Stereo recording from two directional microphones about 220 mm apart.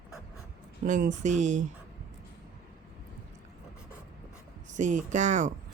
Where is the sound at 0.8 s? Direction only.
35° right (ahead or behind).